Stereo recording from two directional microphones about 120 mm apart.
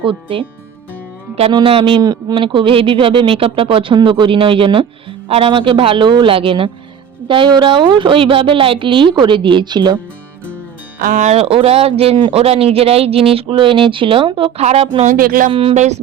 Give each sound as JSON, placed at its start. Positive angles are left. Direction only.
{"t": 0.0, "sound": "speech", "side_deg": -45}
{"t": 1.6, "sound": "speech", "side_deg": -50}
{"t": 11.1, "sound": "speech", "side_deg": -75}
{"t": 14.6, "sound": "speech", "side_deg": -60}
{"t": 15.7, "sound": "music", "side_deg": -75}